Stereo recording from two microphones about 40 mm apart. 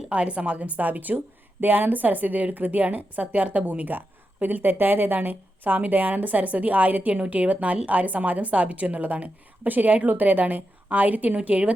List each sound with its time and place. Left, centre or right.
0.1 s a woman's voice: right
11.3 s a woman's voice: right